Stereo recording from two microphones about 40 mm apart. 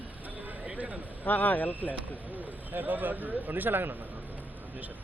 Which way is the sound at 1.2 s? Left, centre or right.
Left.